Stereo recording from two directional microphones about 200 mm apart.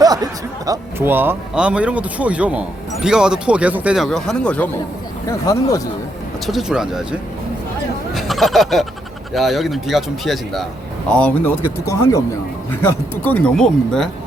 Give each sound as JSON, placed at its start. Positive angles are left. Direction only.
{"t": 0.0, "sound": "speech", "side_deg": -20}
{"t": 6.4, "sound": "speech", "side_deg": 0}
{"t": 8.1, "sound": "snicker", "side_deg": 0}
{"t": 9.3, "sound": "speech", "side_deg": 0}